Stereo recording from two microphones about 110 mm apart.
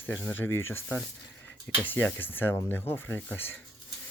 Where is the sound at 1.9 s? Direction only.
15° left (ahead or behind).